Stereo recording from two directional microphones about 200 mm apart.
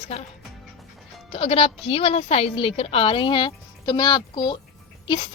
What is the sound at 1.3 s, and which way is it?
A woman's voice, 30° left (ahead or behind).